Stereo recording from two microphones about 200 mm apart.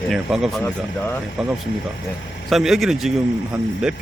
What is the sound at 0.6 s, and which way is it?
Speech, 10° left (ahead or behind).